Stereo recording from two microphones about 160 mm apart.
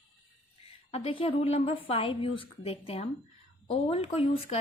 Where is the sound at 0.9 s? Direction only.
35° left (ahead or behind).